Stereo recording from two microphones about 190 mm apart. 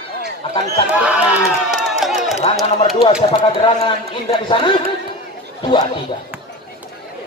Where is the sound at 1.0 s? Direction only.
5° right (ahead or behind).